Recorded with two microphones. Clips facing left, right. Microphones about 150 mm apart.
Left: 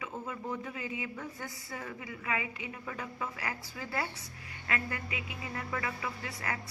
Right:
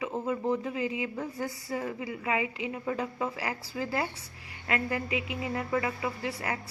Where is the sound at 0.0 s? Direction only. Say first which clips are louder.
Right 9 dB; 30° right (ahead or behind).